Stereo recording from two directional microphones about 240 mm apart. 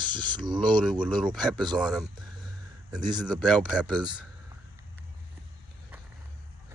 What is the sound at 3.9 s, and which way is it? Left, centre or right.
Speech, centre.